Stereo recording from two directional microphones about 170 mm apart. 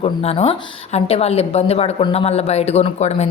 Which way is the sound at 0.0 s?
35° left (ahead or behind).